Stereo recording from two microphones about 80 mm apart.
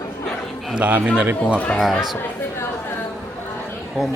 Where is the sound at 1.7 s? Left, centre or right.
Centre.